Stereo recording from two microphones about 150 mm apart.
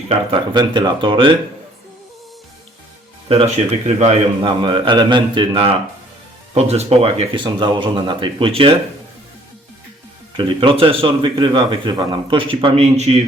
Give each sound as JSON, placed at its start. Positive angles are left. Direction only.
{"t": 0.1, "sound": "speech", "side_deg": -35}
{"t": 3.2, "sound": "speech", "side_deg": -40}
{"t": 10.3, "sound": "speech", "side_deg": -35}